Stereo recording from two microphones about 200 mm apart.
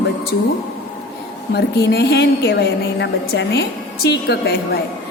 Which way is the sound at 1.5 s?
55° left (ahead or behind).